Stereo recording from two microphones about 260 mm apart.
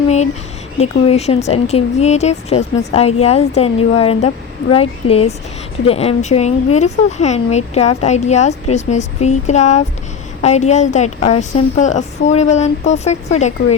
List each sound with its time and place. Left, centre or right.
0.8 s speech: left